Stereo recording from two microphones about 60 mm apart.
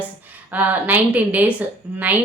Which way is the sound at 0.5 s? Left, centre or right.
Right.